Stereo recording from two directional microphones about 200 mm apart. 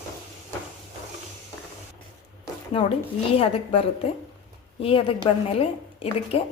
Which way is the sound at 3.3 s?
30° left (ahead or behind).